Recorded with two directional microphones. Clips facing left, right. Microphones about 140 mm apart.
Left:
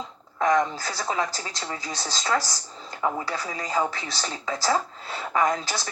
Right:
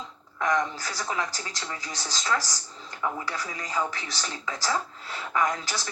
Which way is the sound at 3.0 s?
30° left (ahead or behind).